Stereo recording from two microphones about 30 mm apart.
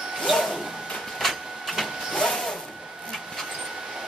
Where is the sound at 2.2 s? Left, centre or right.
Centre.